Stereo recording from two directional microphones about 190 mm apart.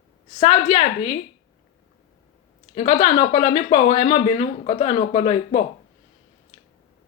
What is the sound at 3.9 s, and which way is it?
Speech, 25° left (ahead or behind).